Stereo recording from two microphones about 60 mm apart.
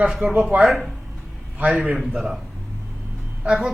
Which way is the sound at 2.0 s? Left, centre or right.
Centre.